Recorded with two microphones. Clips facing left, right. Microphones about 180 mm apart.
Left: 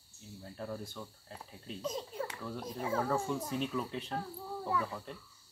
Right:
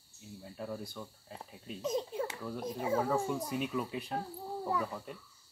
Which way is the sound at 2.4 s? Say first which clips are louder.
Right 2 dB; 5° right (ahead or behind).